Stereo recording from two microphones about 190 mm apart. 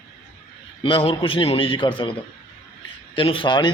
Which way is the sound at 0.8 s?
30° left (ahead or behind).